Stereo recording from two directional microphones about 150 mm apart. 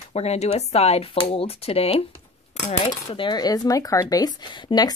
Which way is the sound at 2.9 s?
30° left (ahead or behind).